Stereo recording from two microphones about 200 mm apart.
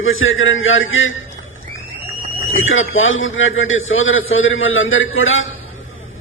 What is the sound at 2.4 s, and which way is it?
A man's voice, 80° left.